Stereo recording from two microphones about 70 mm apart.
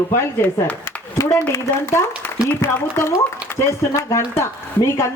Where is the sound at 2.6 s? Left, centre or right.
Left.